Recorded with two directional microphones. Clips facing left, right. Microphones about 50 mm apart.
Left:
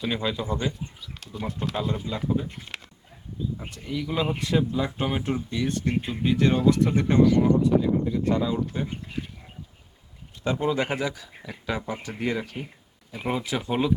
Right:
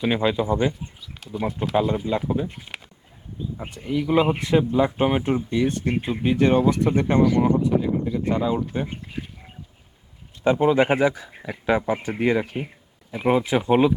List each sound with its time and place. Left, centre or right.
0.0 s speech: right
1.2 s speech: centre
1.7 s speech: right
3.6 s speech: right
10.4 s speech: right